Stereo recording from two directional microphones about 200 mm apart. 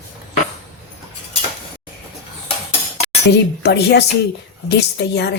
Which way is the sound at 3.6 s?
55° left (ahead or behind).